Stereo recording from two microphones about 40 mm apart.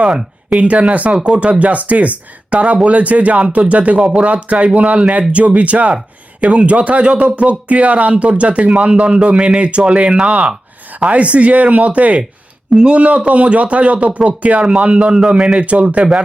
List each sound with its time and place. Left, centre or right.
0.5 s speech: right
15.5 s speech: right